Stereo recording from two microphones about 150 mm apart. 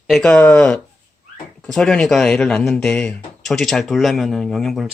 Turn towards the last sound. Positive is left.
turn(degrees=0)  # may be behind; listen again after turning